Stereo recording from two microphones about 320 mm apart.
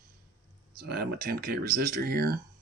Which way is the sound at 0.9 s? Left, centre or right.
Right.